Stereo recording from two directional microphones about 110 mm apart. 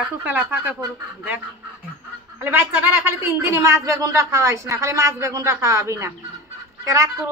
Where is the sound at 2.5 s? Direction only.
20° right (ahead or behind).